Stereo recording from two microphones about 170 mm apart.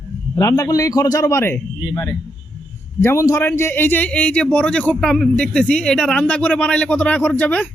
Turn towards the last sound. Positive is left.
turn(degrees=10)  # may be behind; listen again after turning